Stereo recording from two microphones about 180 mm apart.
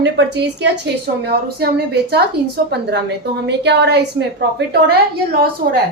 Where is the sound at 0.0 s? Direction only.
70° right (ahead or behind).